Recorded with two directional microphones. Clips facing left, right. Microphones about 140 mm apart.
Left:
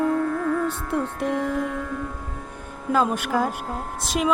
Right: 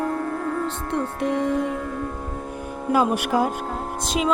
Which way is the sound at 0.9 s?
Centre (ahead or behind).